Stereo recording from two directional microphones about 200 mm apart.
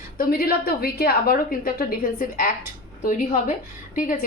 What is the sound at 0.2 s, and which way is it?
A woman's voice, 45° left (ahead or behind).